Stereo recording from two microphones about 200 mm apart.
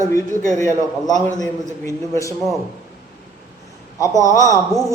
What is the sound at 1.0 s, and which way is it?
A man's voice, 20° left (ahead or behind).